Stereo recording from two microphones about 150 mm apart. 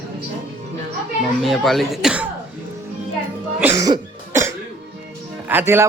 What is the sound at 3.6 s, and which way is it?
Cough, 10° right (ahead or behind).